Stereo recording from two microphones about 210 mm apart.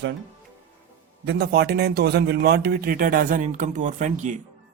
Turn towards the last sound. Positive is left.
turn(degrees=-35)  # may be behind; listen again after turning